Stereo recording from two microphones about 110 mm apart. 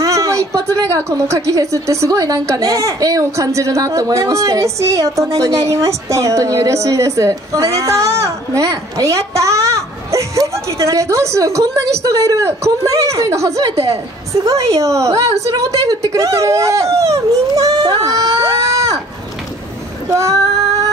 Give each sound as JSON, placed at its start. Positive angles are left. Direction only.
{"t": 0.0, "sound": "a woman's voice", "side_deg": -30}
{"t": 20.1, "sound": "female singing", "side_deg": -30}